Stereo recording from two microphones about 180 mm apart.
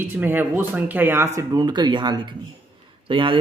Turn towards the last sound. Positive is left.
turn(degrees=-30)  # may be behind; listen again after turning